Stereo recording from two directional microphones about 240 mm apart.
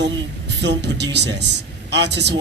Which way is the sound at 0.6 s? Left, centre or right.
Right.